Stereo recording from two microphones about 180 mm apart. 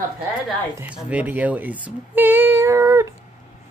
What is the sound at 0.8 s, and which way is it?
Speech, 5° right (ahead or behind).